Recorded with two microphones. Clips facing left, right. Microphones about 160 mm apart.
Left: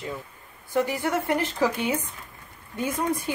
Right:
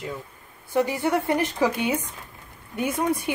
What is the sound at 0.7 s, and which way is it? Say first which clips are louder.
Speech: right 2 dB; 15° right (ahead or behind).